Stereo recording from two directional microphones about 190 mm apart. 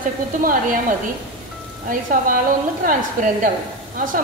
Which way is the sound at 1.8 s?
45° right (ahead or behind).